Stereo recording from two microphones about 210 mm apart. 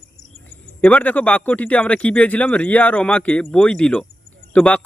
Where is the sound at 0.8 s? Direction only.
5° left (ahead or behind).